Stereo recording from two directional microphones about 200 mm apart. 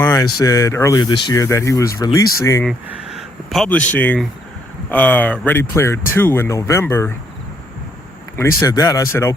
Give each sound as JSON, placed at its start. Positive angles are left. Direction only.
{"t": 0.0, "sound": "a sound", "side_deg": 15}
{"t": 0.3, "sound": "speech", "side_deg": 15}
{"t": 3.2, "sound": "speech", "side_deg": 0}
{"t": 8.4, "sound": "speech", "side_deg": 15}